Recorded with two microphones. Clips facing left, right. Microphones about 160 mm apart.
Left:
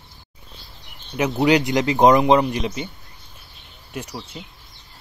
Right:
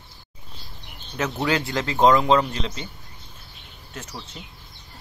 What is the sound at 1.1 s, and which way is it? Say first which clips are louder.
A man's voice: left 6 dB; 15° left (ahead or behind).